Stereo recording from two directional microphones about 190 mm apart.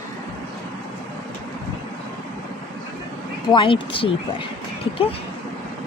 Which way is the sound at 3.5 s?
25° left (ahead or behind).